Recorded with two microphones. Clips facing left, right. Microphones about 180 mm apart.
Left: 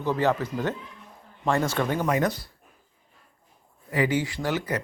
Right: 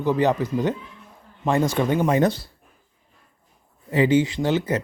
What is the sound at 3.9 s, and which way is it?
Speech, 25° right (ahead or behind).